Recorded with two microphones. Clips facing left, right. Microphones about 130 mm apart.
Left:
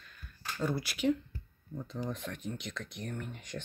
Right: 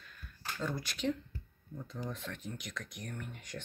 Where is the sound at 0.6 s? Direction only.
10° left (ahead or behind).